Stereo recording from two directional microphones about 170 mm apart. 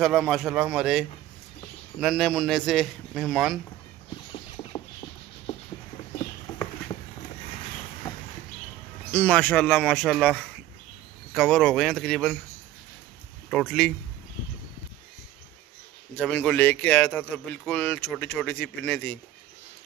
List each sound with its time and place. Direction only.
0.0 s a man's voice: centre (ahead or behind)
4.6 s rodents: 35° left (ahead or behind)
9.1 s a man's voice: 5° left (ahead or behind)
13.5 s a man's voice: 5° left (ahead or behind)
16.2 s speech: 5° left (ahead or behind)